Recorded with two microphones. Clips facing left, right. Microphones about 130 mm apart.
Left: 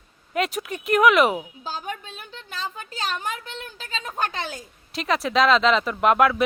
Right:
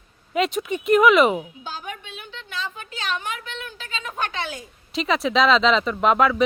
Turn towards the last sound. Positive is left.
turn(degrees=5)  # may be behind; listen again after turning